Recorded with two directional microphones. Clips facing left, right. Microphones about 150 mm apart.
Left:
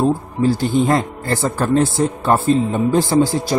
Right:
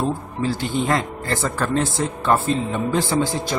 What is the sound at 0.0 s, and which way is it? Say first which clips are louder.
Speech: left 7 dB; 40° left (ahead or behind).